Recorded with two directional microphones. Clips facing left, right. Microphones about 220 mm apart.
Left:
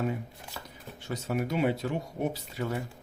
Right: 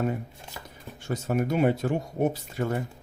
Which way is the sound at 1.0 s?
50° right (ahead or behind).